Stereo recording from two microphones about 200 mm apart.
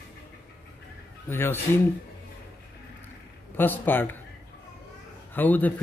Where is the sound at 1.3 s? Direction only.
10° left (ahead or behind).